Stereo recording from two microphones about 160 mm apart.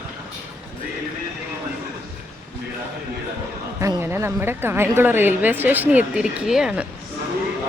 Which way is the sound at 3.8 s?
15° right (ahead or behind).